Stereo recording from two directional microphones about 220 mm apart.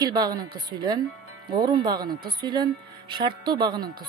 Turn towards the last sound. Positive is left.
turn(degrees=-20)  # may be behind; listen again after turning